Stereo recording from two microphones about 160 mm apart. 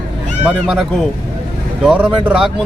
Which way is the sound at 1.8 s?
5° right (ahead or behind).